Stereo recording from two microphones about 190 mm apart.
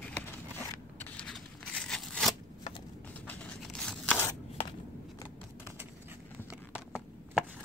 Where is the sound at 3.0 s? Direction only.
10° left (ahead or behind).